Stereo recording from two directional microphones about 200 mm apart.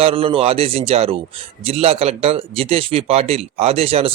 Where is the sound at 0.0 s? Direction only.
25° right (ahead or behind).